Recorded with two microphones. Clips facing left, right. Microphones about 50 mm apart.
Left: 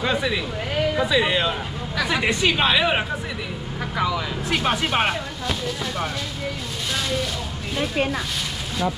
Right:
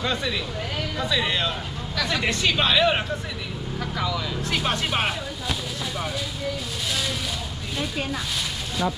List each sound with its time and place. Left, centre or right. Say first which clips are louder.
0.0 s a sound: left 4 dB; centre
0.7 s speech: left 6 dB; centre
4.6 s speech: left 4 dB; centre